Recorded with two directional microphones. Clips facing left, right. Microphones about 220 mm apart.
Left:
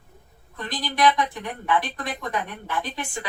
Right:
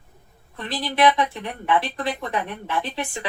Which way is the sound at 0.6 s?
30° right (ahead or behind).